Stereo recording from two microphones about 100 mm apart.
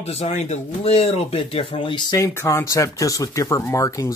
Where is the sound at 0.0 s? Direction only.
90° left.